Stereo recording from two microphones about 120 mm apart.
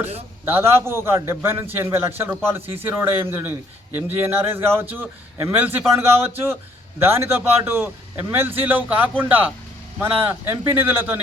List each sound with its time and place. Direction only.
0.4 s a man's voice: 20° right (ahead or behind)
2.6 s speech: 55° right (ahead or behind)
2.8 s a man's voice: 20° right (ahead or behind)
10.7 s speech: 15° right (ahead or behind)